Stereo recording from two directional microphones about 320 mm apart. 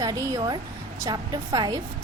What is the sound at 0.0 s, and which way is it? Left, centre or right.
A woman's voice, centre.